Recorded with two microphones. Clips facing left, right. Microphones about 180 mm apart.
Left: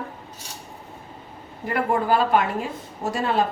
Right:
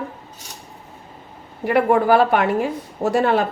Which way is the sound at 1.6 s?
70° right (ahead or behind).